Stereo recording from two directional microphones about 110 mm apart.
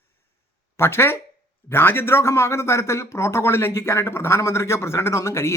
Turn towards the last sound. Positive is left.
turn(degrees=25)  # may be behind; listen again after turning